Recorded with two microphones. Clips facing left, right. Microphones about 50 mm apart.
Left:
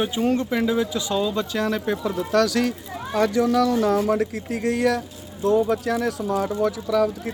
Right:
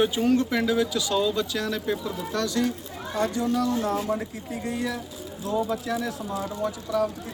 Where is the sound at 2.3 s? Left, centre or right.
Left.